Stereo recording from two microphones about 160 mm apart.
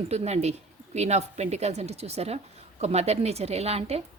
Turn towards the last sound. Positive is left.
turn(degrees=-40)  # may be behind; listen again after turning